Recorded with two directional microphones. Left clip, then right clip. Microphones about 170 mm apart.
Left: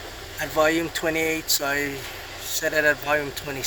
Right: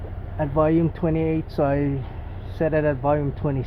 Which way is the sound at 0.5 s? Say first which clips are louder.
Even; centre (ahead or behind).